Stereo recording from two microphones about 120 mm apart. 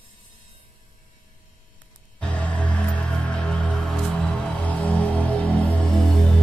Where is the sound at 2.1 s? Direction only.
10° left (ahead or behind).